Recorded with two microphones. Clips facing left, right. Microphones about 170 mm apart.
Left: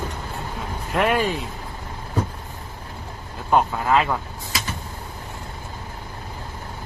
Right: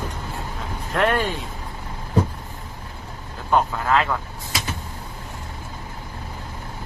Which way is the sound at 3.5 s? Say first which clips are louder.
Left 1 dB; 15° left (ahead or behind).